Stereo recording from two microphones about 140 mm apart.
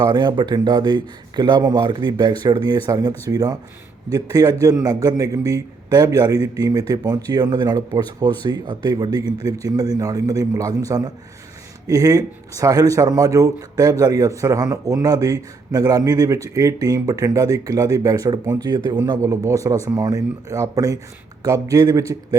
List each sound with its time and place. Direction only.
0.0 s speech: 30° right (ahead or behind)